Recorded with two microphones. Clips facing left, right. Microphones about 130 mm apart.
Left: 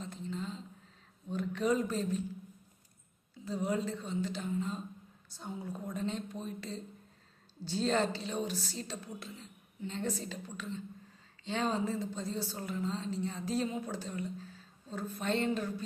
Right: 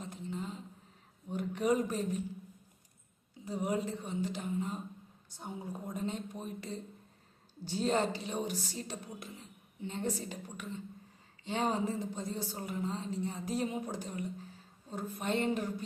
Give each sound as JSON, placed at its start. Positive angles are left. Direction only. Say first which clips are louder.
{"t": 0.0, "sound": "a sound", "louder": "left 1 dB", "side_deg": -15}
{"t": 1.3, "sound": "speech", "louder": "even", "side_deg": -15}
{"t": 3.4, "sound": "a woman's voice", "louder": "even", "side_deg": -15}